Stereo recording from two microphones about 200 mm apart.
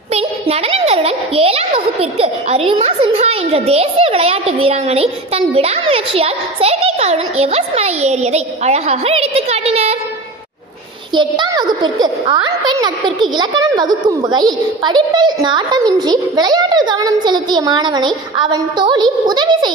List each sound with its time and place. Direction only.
0.1 s a child's voice: 30° right (ahead or behind)
11.1 s a child's voice: 20° right (ahead or behind)